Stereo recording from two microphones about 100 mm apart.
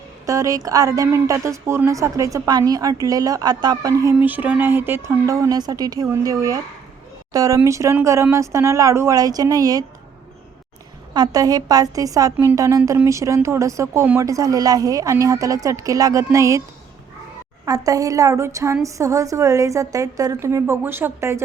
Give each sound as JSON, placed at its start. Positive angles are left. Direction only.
{"t": 0.3, "sound": "a woman's voice", "side_deg": -35}
{"t": 4.2, "sound": "a woman's voice", "side_deg": -15}
{"t": 11.1, "sound": "a woman's voice", "side_deg": -40}
{"t": 17.7, "sound": "a woman's voice", "side_deg": -35}